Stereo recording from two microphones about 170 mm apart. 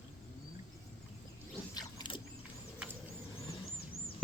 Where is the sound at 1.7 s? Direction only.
25° left (ahead or behind).